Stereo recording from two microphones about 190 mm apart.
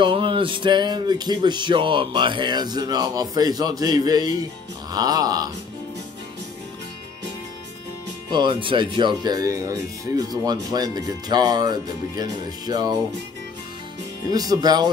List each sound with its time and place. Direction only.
0.0 s speech: 25° right (ahead or behind)
8.3 s speech: 25° right (ahead or behind)
14.2 s speech: 20° right (ahead or behind)